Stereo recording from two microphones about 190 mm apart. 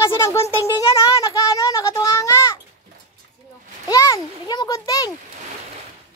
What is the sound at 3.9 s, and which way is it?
A child's voice, 15° left (ahead or behind).